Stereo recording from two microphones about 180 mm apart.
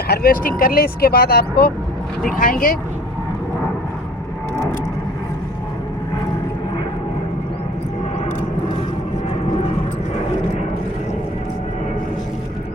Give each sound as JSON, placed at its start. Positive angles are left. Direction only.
{"t": 0.1, "sound": "speech", "side_deg": 55}